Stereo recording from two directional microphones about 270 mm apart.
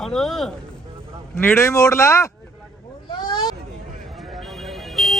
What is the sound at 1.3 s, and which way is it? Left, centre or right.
Speech, centre.